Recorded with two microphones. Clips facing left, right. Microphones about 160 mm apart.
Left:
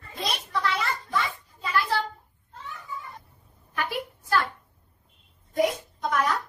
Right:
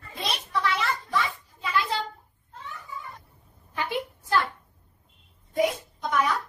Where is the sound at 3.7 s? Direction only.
20° right (ahead or behind).